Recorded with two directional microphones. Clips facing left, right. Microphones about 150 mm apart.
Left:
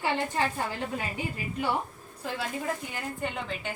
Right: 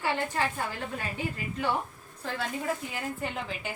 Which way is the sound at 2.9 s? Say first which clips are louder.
Even; 5° right (ahead or behind).